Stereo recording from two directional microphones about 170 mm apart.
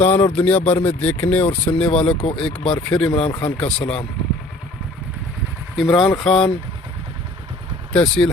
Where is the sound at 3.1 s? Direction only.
30° left (ahead or behind).